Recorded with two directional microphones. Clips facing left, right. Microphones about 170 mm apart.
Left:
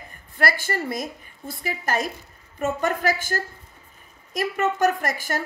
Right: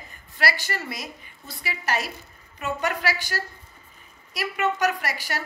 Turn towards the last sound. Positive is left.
turn(degrees=50)  # may be behind; listen again after turning